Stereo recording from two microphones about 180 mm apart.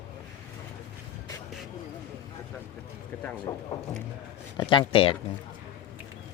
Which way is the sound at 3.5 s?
20° left (ahead or behind).